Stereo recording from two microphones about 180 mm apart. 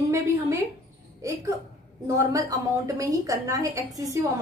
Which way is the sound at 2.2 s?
20° right (ahead or behind).